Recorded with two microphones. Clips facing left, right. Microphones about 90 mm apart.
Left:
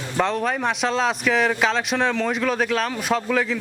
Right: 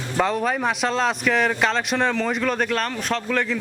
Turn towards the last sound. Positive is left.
turn(degrees=5)  # may be behind; listen again after turning